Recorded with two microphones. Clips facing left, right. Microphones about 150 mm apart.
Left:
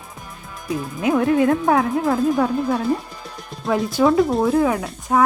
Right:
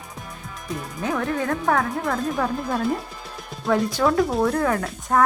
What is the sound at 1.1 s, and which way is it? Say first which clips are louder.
Speech: left 8 dB; 15° left (ahead or behind).